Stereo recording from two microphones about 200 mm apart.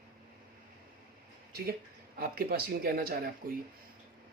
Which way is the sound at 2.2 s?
50° right (ahead or behind).